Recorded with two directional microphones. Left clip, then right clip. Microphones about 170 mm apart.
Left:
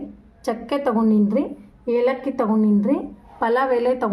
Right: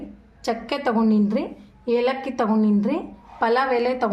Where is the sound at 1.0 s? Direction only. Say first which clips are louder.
Left 2 dB; 15° left (ahead or behind).